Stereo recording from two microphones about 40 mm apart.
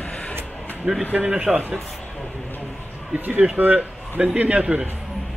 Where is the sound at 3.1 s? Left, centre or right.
Right.